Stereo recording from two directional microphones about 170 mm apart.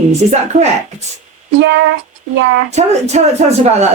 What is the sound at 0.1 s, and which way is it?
Speech, 40° right (ahead or behind).